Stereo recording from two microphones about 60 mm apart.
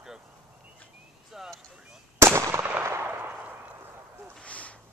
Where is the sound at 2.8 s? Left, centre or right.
Right.